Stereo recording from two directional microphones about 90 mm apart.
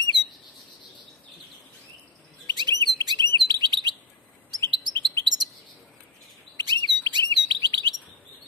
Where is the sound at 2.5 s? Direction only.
55° right (ahead or behind).